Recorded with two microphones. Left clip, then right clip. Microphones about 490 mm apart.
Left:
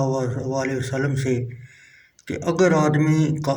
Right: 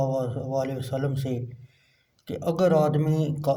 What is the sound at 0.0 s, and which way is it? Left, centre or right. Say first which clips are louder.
Speech: left 3 dB; right.